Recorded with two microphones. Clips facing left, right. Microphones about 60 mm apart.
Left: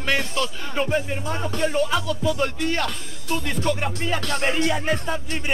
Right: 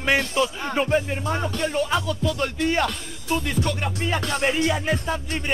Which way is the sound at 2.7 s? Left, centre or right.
Centre.